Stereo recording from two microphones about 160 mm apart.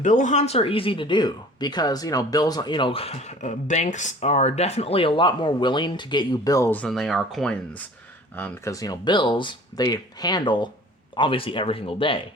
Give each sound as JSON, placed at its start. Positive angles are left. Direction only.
{"t": 0.0, "sound": "speech", "side_deg": 50}